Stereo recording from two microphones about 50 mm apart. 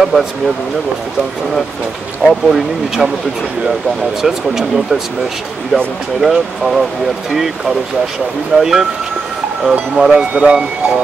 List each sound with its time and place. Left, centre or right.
0.0 s speech: centre
2.2 s speech: centre
4.2 s speech: centre
6.2 s speech: centre
8.5 s speech: centre